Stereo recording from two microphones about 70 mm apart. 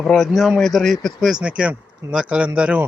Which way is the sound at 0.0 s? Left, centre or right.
Centre.